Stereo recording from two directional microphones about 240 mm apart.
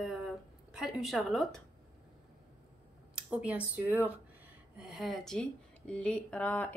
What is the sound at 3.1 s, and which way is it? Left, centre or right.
Speech, centre.